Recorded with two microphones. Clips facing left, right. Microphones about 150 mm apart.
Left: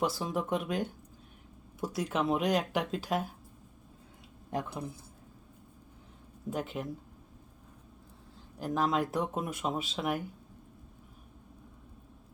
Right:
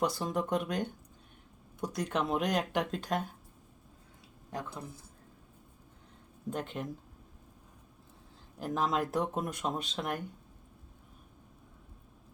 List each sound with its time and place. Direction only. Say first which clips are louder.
0.0 s speech: even; centre (ahead or behind)
4.5 s speech: left 5 dB; 20° left (ahead or behind)
6.5 s speech: left 2 dB; 5° left (ahead or behind)
8.5 s speech: left 2 dB; centre (ahead or behind)